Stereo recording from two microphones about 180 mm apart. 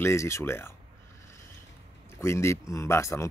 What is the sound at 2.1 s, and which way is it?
Speech, 15° left (ahead or behind).